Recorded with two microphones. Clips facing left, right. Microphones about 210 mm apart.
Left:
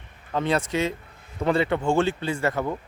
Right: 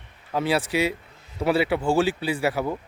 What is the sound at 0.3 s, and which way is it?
Speech, 10° right (ahead or behind).